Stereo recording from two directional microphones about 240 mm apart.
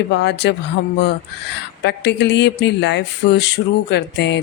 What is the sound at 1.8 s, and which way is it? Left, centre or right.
Speech, left.